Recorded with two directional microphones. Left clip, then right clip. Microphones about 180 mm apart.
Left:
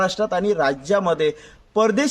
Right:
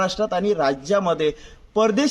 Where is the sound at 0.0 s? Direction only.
20° left (ahead or behind).